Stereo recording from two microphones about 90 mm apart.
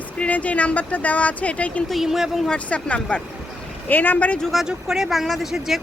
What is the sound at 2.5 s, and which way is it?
Speech, 15° left (ahead or behind).